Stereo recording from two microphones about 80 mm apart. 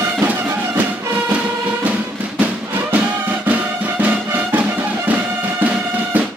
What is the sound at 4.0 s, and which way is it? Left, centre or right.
Music, right.